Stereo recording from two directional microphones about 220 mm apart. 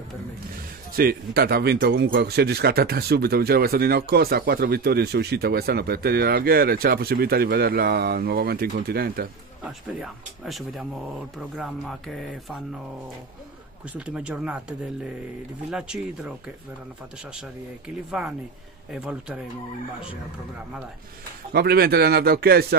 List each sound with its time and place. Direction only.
0.9 s speech: 45° right (ahead or behind)
9.7 s speech: centre (ahead or behind)
13.9 s speech: 5° right (ahead or behind)
18.9 s speech: 5° right (ahead or behind)
21.5 s speech: 45° right (ahead or behind)